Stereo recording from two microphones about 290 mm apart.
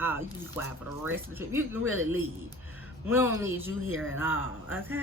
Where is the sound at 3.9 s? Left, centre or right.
Right.